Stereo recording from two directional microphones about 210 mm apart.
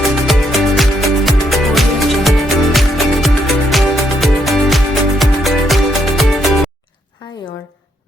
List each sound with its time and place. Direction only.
0.3 s music: centre (ahead or behind)